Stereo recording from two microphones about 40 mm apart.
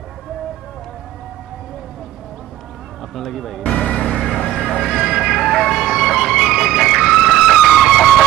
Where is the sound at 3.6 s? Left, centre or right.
Left.